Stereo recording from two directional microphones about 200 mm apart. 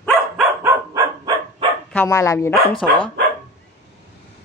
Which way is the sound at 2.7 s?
25° left (ahead or behind).